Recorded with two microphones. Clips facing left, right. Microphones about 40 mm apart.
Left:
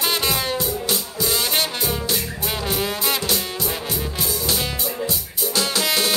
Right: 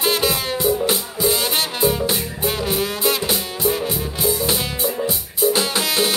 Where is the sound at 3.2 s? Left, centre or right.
Centre.